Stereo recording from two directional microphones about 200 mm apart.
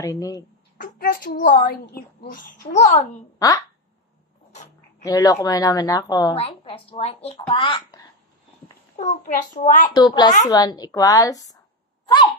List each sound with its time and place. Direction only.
0.0 s a woman's voice: 15° left (ahead or behind)
0.7 s a woman's voice: 45° left (ahead or behind)
3.3 s speech: 15° left (ahead or behind)
5.0 s a woman's voice: 20° left (ahead or behind)
8.9 s a child's voice: 35° left (ahead or behind)
9.9 s a woman's voice: 20° left (ahead or behind)